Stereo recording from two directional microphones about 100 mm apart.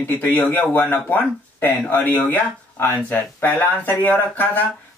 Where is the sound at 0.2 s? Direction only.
20° left (ahead or behind).